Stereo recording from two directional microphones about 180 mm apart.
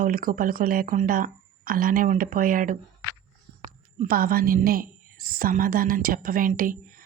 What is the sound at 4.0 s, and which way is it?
Speech, 55° right (ahead or behind).